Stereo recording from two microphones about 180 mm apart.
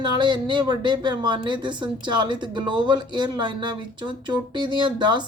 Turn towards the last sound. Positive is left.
turn(degrees=-25)  # may be behind; listen again after turning